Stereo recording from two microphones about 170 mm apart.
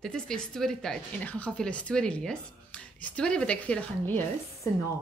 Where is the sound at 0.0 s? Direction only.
5° left (ahead or behind).